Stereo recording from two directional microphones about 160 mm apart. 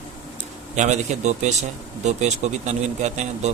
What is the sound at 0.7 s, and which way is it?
Speech, 50° right (ahead or behind).